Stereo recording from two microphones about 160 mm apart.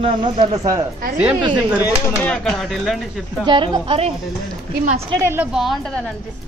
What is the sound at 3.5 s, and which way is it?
Speech, 35° right (ahead or behind).